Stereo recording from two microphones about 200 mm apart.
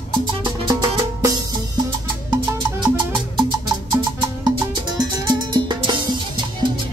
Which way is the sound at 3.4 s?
20° right (ahead or behind).